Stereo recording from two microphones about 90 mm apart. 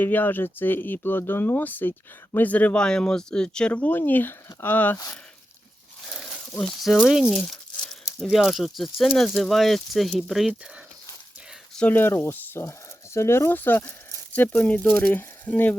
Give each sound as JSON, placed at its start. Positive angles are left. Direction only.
{"t": 0.0, "sound": "speech", "side_deg": 20}
{"t": 6.1, "sound": "a sound", "side_deg": 0}
{"t": 7.1, "sound": "speech", "side_deg": 0}
{"t": 7.4, "sound": "crumpling", "side_deg": 5}
{"t": 8.3, "sound": "speech", "side_deg": 0}
{"t": 11.9, "sound": "speech", "side_deg": 25}